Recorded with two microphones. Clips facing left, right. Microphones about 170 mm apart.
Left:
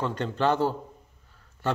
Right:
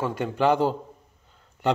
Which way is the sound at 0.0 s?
10° right (ahead or behind).